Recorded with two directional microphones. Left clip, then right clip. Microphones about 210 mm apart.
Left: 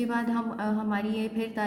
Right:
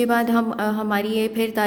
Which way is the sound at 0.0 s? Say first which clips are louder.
Right 10 dB; 50° right (ahead or behind).